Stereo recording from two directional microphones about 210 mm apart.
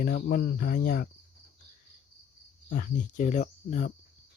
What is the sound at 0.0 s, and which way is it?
Cricket, 45° left (ahead or behind).